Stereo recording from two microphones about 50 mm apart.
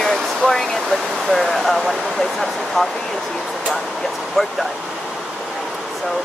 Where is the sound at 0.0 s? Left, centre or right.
Centre.